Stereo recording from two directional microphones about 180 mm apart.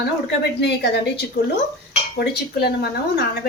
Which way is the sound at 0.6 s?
70° left (ahead or behind).